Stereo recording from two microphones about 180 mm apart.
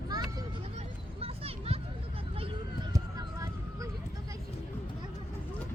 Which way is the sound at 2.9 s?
20° right (ahead or behind).